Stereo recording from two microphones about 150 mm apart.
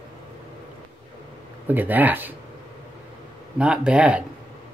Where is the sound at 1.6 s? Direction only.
10° right (ahead or behind).